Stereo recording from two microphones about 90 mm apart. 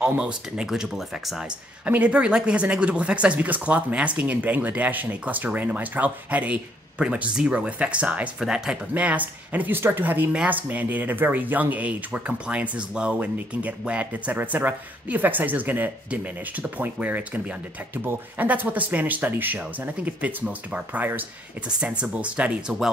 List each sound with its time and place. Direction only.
0.2 s speech: 10° right (ahead or behind)
1.9 s speech: 15° right (ahead or behind)